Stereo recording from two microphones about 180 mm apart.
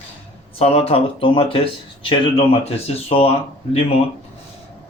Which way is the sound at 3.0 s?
30° left (ahead or behind).